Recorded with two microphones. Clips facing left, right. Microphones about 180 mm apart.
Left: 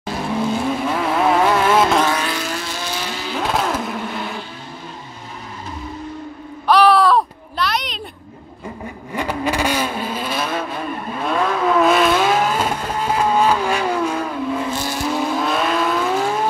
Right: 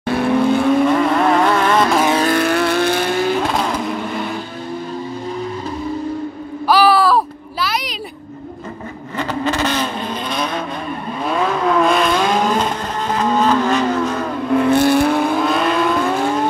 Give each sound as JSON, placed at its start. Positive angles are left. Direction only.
{"t": 0.0, "sound": "vehicle", "side_deg": -60}
{"t": 0.8, "sound": "vehicle", "side_deg": 5}
{"t": 2.2, "sound": "vehicle", "side_deg": -60}
{"t": 3.5, "sound": "vehicle", "side_deg": 0}
{"t": 6.7, "sound": "a sound", "side_deg": -5}
{"t": 9.1, "sound": "vehicle", "side_deg": 10}
{"t": 14.5, "sound": "vehicle", "side_deg": -60}
{"t": 15.4, "sound": "vehicle", "side_deg": 0}